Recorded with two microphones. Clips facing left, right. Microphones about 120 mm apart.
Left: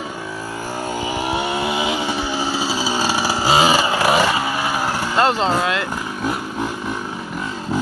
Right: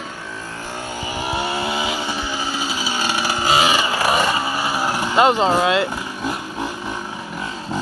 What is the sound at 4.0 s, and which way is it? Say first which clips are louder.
Vehicle: left 2 dB; 10° left (ahead or behind).